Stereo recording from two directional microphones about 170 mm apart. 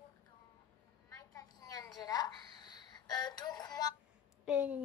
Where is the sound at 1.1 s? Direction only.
20° left (ahead or behind).